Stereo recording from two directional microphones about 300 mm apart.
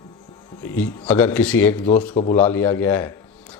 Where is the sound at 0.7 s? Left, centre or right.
Centre.